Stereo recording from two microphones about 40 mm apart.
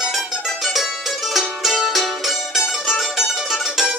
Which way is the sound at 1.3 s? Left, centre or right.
Centre.